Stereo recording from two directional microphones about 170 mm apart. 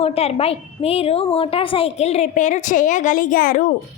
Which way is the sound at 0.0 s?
35° left (ahead or behind).